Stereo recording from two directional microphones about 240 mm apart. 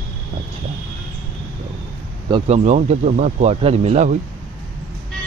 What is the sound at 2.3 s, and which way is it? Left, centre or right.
Speech, right.